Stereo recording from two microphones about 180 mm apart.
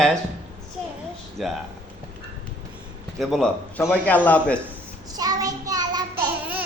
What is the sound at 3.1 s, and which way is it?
A man's voice, centre (ahead or behind).